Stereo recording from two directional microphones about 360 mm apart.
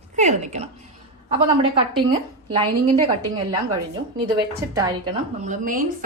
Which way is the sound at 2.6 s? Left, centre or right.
Centre.